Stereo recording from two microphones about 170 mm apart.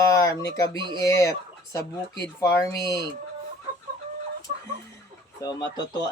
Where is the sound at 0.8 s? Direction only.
25° right (ahead or behind).